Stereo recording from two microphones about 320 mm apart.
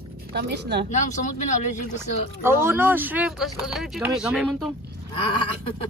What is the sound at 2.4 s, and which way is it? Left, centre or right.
Speech, centre.